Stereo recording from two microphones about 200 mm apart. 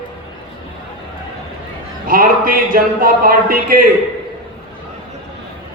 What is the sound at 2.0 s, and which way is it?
Speech, 45° right (ahead or behind).